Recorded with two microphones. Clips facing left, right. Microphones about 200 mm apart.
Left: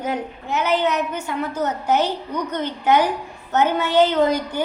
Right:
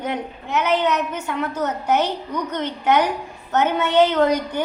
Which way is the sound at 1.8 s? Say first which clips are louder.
Even; 60° right (ahead or behind).